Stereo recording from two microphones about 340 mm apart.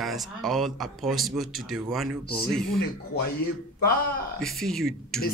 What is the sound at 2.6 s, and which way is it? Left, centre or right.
Speech, left.